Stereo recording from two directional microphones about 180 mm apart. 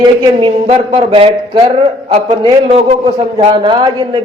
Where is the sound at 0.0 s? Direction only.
30° right (ahead or behind).